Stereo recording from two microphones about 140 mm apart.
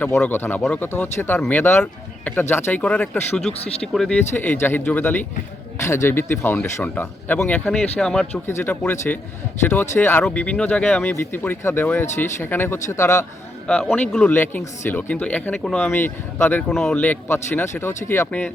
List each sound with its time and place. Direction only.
0.2 s speech: 15° left (ahead or behind)
4.4 s speech: 15° left (ahead or behind)
13.9 s speech: 10° left (ahead or behind)